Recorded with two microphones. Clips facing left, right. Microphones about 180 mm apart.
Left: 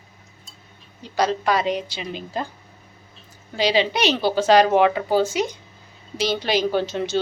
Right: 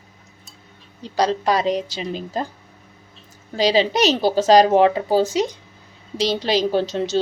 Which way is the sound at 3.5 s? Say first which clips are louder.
Right 3 dB; 40° right (ahead or behind).